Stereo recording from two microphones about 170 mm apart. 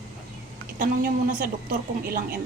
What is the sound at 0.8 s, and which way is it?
A woman's voice, 55° right (ahead or behind).